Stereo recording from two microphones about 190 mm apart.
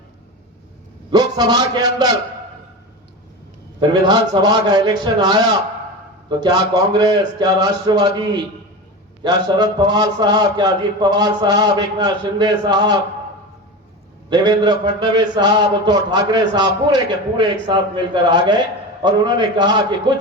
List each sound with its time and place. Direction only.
1.1 s a man's voice: 20° right (ahead or behind)
3.8 s a man's voice: 20° right (ahead or behind)
14.3 s a man's voice: 20° right (ahead or behind)